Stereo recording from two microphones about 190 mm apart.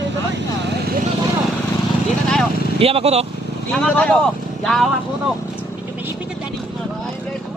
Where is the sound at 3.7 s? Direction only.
5° left (ahead or behind).